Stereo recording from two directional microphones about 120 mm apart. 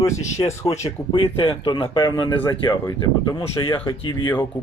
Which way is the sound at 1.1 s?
45° left (ahead or behind).